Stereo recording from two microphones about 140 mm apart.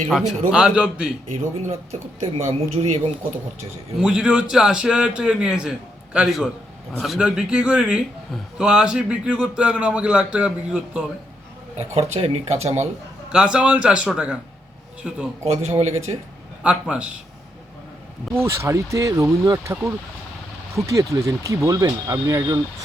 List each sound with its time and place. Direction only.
0.1 s a man's voice: 5° right (ahead or behind)
1.6 s speech: 50° right (ahead or behind)
3.9 s a man's voice: 5° right (ahead or behind)
11.8 s speech: 50° right (ahead or behind)
13.3 s a man's voice: 5° right (ahead or behind)
15.4 s speech: 50° right (ahead or behind)
16.6 s a man's voice: 10° right (ahead or behind)
18.3 s speech: 20° right (ahead or behind)